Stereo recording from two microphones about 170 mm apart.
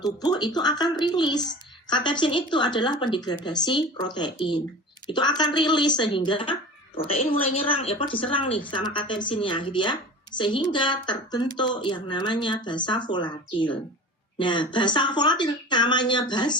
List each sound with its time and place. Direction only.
0.0 s speech: 25° left (ahead or behind)